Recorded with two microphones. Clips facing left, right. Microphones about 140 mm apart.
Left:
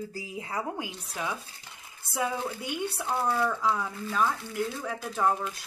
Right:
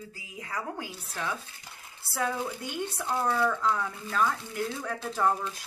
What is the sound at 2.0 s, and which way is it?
Speech, 15° left (ahead or behind).